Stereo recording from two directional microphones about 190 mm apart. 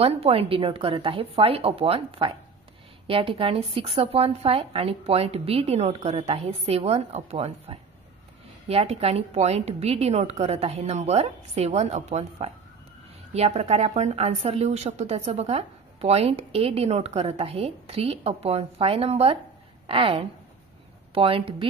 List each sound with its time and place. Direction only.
0.0 s a woman's voice: 30° right (ahead or behind)